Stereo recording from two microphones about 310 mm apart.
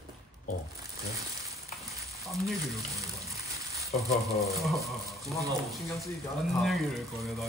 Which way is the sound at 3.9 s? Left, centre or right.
Centre.